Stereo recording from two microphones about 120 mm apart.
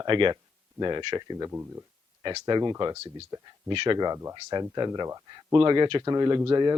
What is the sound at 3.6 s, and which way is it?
Speech, 40° right (ahead or behind).